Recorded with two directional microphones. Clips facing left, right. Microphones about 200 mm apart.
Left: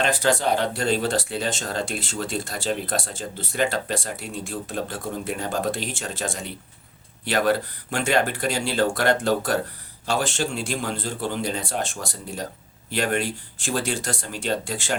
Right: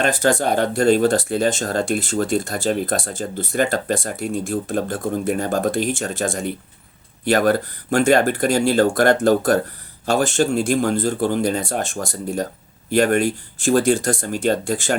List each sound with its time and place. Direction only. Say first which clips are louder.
0.0 s speech: right 4 dB; 45° right (ahead or behind)